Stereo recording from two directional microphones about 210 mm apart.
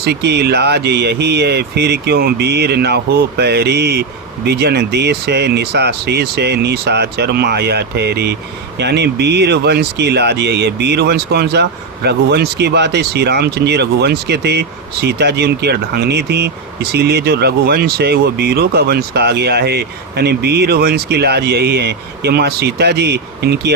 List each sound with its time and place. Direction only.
0.0 s speech: 55° right (ahead or behind)